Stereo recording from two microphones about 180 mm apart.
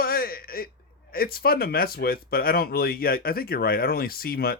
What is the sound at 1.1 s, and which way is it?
Speech, 55° left (ahead or behind).